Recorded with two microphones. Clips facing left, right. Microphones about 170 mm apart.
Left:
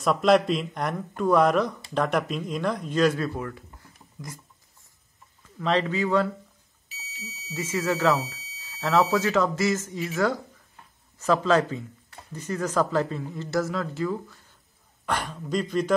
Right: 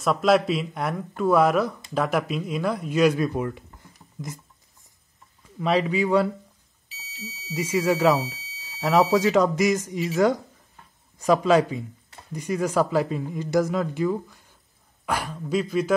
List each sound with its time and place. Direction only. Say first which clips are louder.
0.0 s speech: even; centre (ahead or behind); by 3.6 s 20° right (ahead or behind)
5.6 s speech: right 2 dB; 10° right (ahead or behind)
7.2 s speech: right 4 dB; 30° right (ahead or behind)
7.5 s speech: right 4 dB; 15° right (ahead or behind)